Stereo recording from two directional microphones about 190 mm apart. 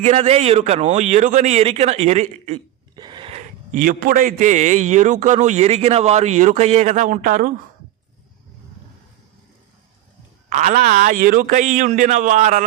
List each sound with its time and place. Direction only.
0.0 s a man's voice: 30° right (ahead or behind)
2.9 s a sound: 25° right (ahead or behind)
3.7 s a man's voice: 50° right (ahead or behind)
10.5 s a man's voice: 40° right (ahead or behind)